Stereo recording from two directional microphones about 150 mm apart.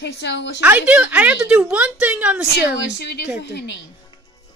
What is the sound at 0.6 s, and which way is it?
Speech, 10° right (ahead or behind).